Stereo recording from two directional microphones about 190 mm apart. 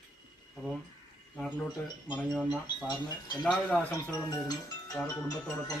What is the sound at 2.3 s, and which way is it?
Speech, 5° right (ahead or behind).